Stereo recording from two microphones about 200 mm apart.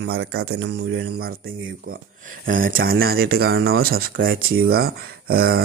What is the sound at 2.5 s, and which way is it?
Speech, 45° right (ahead or behind).